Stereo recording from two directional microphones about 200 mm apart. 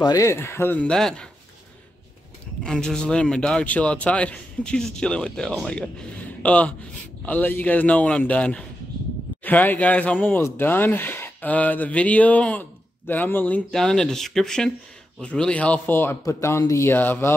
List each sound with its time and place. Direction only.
0.0 s speech: 15° left (ahead or behind)
2.6 s speech: 5° left (ahead or behind)